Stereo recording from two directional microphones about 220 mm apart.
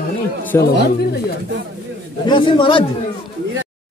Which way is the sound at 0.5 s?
10° left (ahead or behind).